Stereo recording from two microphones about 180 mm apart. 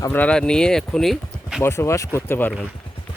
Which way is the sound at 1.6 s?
15° left (ahead or behind).